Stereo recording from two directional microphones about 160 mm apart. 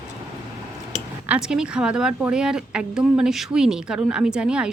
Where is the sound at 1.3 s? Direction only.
5° right (ahead or behind).